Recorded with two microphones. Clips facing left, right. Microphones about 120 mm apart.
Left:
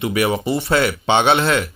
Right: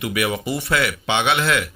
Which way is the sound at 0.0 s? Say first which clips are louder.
Left 4 dB; 30° left (ahead or behind).